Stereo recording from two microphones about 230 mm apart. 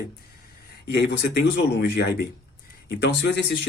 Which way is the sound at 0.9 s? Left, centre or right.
Left.